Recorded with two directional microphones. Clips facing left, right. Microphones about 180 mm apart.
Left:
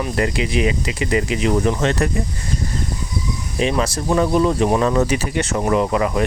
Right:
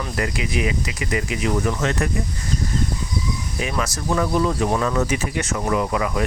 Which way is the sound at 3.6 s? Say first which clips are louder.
Left 7 dB; 25° left (ahead or behind).